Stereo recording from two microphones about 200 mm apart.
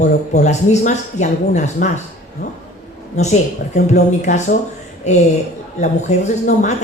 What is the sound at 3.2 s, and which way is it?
Speech, 35° left (ahead or behind).